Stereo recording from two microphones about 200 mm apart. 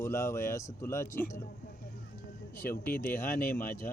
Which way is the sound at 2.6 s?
45° left (ahead or behind).